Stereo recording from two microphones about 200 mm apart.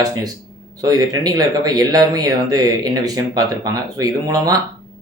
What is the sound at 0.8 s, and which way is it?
Speech, 20° right (ahead or behind).